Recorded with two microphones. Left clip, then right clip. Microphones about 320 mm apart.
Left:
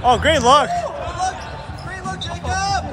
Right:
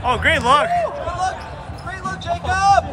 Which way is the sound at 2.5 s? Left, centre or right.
Centre.